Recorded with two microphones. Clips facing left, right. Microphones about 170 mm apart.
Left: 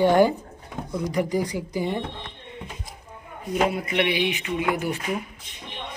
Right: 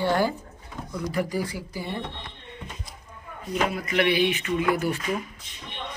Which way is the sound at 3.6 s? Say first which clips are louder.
Left 1 dB; 20° left (ahead or behind).